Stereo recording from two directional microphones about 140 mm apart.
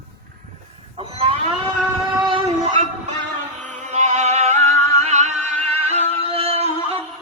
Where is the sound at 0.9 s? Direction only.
45° right (ahead or behind).